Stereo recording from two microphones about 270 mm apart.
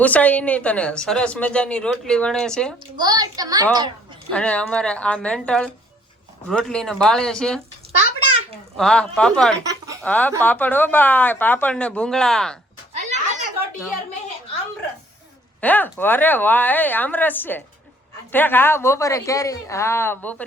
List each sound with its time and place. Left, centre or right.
0.0 s a woman's voice: centre
3.0 s a woman's voice: centre
4.3 s a woman's voice: centre
8.7 s a woman's voice: centre
9.6 s a sound: centre
10.0 s a woman's voice: centre
13.0 s a sound: right
15.6 s speech: centre